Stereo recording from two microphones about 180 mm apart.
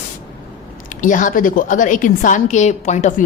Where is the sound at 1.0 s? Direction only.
45° left (ahead or behind).